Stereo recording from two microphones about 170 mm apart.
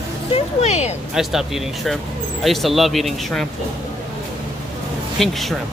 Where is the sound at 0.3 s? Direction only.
40° left (ahead or behind).